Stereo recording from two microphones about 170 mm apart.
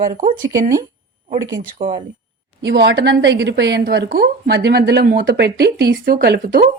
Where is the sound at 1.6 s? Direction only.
50° right (ahead or behind).